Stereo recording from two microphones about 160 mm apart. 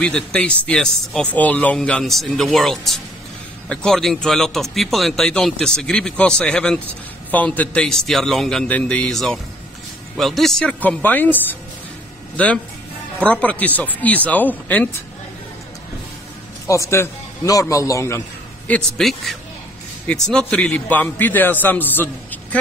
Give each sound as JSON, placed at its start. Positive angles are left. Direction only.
{"t": 0.0, "sound": "a man's voice", "side_deg": 5}
{"t": 13.2, "sound": "a man's voice", "side_deg": 10}
{"t": 16.6, "sound": "a man's voice", "side_deg": 20}
{"t": 18.7, "sound": "a man's voice", "side_deg": 0}